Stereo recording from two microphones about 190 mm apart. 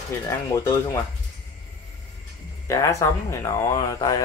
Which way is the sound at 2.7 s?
15° left (ahead or behind).